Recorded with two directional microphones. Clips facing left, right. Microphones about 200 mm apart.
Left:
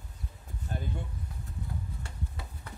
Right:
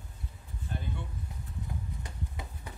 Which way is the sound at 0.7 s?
40° left (ahead or behind).